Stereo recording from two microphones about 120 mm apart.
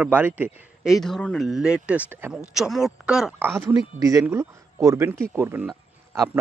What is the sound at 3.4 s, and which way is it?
A man's voice, 20° right (ahead or behind).